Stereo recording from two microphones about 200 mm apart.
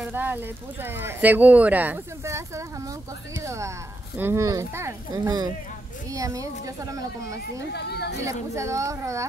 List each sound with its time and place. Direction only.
0.0 s speech: 10° right (ahead or behind)
7.7 s speech: 55° left (ahead or behind)
8.3 s speech: 15° right (ahead or behind)